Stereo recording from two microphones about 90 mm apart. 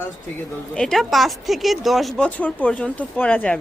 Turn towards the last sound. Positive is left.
turn(degrees=20)  # may be behind; listen again after turning